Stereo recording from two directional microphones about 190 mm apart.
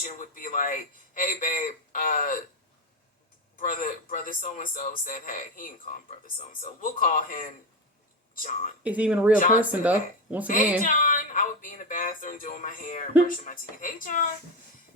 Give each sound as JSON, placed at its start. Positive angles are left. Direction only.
{"t": 0.0, "sound": "a man's voice", "side_deg": 45}
{"t": 3.6, "sound": "a man's voice", "side_deg": 45}
{"t": 8.8, "sound": "speech", "side_deg": -5}
{"t": 9.4, "sound": "a man's voice", "side_deg": 45}
{"t": 9.7, "sound": "speech", "side_deg": -10}
{"t": 10.8, "sound": "a man's voice", "side_deg": 45}